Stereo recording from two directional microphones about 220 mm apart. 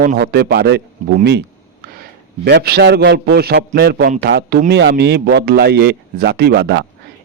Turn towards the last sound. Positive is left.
turn(degrees=-45)  # may be behind; listen again after turning